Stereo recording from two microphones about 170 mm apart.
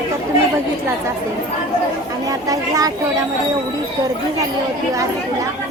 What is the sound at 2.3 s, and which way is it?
Speech, 20° right (ahead or behind).